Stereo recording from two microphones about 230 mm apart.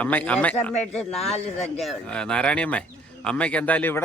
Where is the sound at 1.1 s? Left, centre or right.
Left.